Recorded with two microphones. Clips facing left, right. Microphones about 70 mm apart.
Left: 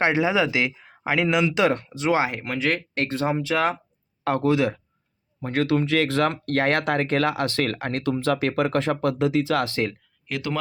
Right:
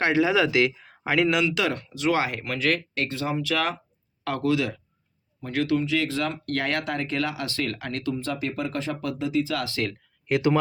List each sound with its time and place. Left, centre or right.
0.0 s speech: left
1.5 s speech: left
2.9 s speech: left
8.1 s speech: left
9.1 s speech: left
9.6 s speech: left
10.2 s speech: centre